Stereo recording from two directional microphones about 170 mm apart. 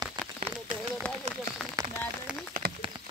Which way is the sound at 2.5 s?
55° right (ahead or behind).